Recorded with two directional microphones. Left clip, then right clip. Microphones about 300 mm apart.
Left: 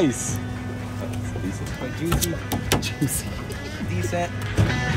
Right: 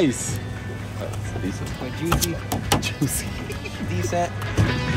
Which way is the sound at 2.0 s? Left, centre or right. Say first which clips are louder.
Right 3 dB; centre.